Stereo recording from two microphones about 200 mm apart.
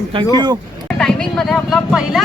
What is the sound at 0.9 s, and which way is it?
Speech, 5° left (ahead or behind).